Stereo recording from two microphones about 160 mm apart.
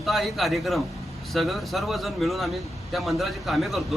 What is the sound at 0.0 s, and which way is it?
Speech, centre (ahead or behind).